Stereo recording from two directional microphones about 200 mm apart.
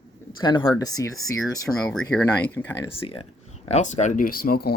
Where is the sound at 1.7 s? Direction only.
Centre (ahead or behind).